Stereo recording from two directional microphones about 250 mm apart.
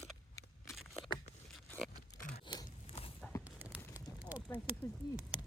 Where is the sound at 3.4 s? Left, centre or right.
Centre.